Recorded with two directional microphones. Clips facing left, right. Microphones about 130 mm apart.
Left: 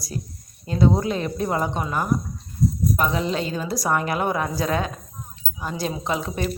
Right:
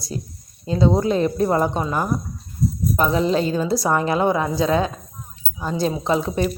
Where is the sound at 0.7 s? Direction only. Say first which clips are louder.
Right 2 dB; 25° right (ahead or behind).